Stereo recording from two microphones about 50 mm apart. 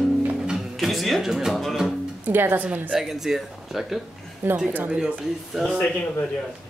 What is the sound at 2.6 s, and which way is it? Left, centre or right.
Speech, right.